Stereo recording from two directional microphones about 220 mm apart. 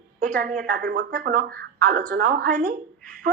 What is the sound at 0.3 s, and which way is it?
Speech, 40° right (ahead or behind).